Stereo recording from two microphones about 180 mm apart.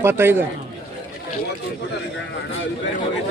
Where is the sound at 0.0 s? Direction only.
15° right (ahead or behind).